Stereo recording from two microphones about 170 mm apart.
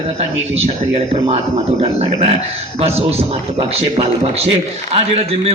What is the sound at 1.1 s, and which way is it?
A man's voice, 35° right (ahead or behind).